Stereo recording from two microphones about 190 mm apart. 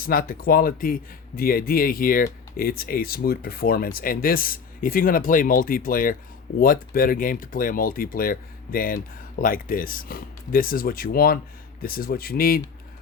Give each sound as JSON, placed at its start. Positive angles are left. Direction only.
{"t": 0.0, "sound": "speech", "side_deg": 50}